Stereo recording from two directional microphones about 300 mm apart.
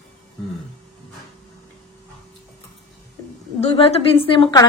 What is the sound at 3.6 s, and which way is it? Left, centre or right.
A woman's voice, centre.